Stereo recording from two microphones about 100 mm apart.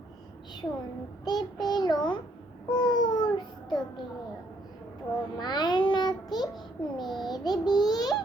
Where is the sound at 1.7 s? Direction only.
45° left (ahead or behind).